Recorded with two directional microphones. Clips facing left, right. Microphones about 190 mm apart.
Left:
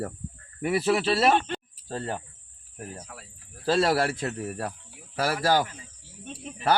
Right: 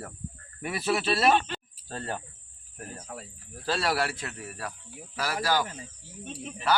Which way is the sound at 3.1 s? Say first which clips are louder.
Right 5 dB; 35° right (ahead or behind).